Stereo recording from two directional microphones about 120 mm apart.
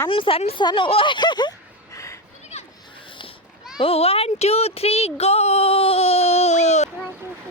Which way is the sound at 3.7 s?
55° left (ahead or behind).